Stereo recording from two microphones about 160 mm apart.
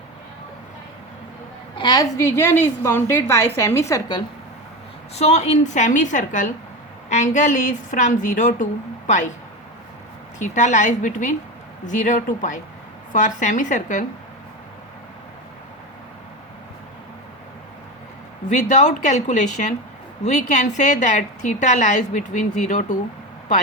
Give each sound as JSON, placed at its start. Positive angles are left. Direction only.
{"t": 1.8, "sound": "a woman's voice", "side_deg": 25}
{"t": 5.1, "sound": "a woman's voice", "side_deg": 45}
{"t": 10.3, "sound": "a woman's voice", "side_deg": 50}
{"t": 18.4, "sound": "a woman's voice", "side_deg": 50}